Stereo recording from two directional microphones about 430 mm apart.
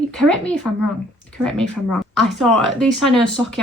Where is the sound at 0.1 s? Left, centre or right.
Centre.